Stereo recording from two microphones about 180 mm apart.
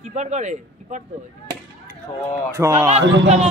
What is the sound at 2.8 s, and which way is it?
Speech, 35° right (ahead or behind).